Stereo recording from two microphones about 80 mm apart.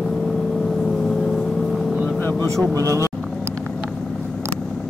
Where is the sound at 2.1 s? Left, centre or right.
Left.